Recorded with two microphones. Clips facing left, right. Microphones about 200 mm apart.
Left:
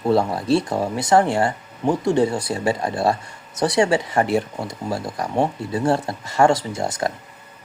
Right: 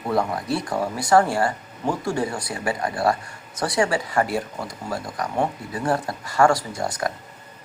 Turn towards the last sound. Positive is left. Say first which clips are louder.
# left 3 dB
turn(degrees=25)  # may be behind; listen again after turning